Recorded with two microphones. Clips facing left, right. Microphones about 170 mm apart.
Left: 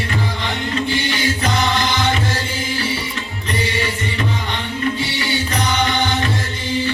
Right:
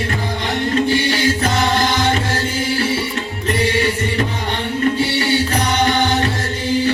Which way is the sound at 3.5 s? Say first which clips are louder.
Right 5 dB; 50° right (ahead or behind).